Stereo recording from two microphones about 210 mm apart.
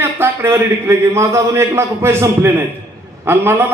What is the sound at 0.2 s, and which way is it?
A man's voice, 10° right (ahead or behind).